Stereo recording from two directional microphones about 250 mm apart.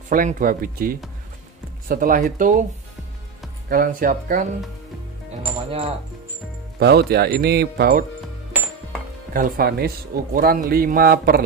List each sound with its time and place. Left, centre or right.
0.1 s a man's voice: right
3.6 s a man's voice: right
6.8 s a man's voice: right
9.3 s a man's voice: right